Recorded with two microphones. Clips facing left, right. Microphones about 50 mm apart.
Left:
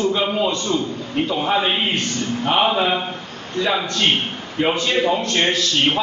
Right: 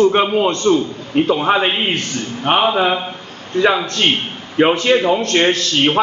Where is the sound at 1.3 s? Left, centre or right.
Right.